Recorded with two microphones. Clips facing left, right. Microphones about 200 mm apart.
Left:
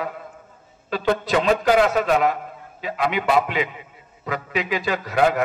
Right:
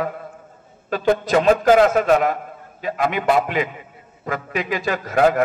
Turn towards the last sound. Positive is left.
turn(degrees=-45)  # may be behind; listen again after turning